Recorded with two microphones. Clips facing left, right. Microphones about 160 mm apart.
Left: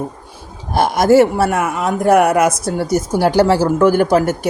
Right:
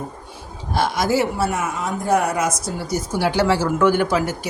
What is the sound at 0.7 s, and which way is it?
Speech, 50° left (ahead or behind).